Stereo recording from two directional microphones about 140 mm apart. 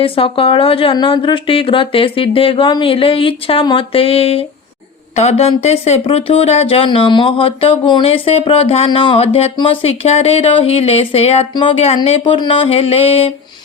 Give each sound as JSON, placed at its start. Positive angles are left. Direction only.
{"t": 0.0, "sound": "speech", "side_deg": 40}